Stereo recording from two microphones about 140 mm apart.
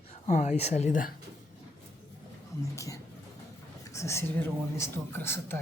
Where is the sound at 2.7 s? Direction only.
25° left (ahead or behind).